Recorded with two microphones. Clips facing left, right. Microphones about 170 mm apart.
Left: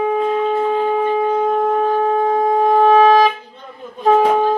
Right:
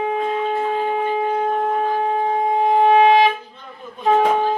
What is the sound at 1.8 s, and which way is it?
Wind instrument, 40° left (ahead or behind).